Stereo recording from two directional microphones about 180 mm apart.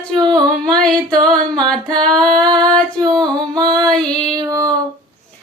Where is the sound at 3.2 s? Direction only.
20° right (ahead or behind).